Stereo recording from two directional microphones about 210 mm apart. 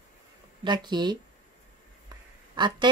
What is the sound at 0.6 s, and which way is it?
Speech, 20° right (ahead or behind).